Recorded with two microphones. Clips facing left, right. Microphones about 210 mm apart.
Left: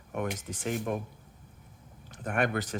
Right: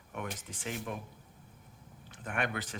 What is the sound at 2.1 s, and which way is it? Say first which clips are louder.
Speech: left 6 dB; 40° left (ahead or behind).